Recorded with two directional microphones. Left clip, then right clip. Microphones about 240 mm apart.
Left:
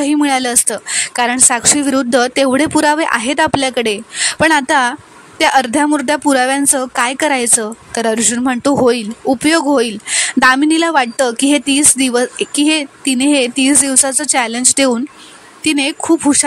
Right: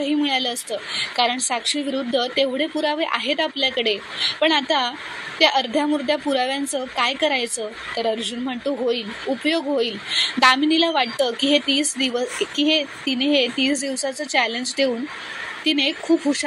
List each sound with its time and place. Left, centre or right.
0.0 s a woman's voice: left